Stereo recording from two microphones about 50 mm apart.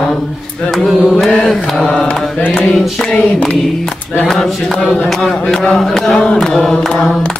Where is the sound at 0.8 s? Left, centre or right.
Centre.